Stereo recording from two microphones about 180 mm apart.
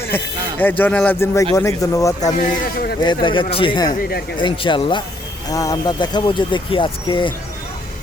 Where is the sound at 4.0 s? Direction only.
60° left (ahead or behind).